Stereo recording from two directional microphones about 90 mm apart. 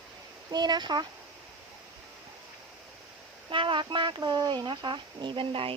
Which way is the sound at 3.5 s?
70° right (ahead or behind).